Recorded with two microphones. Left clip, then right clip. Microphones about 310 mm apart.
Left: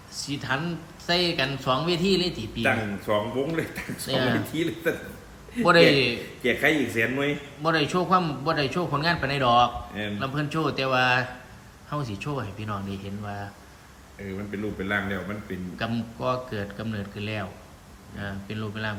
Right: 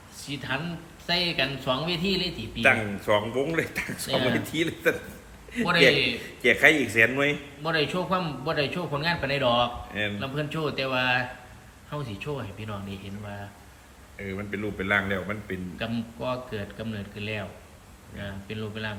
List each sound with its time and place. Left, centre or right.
0.3 s a man's voice: centre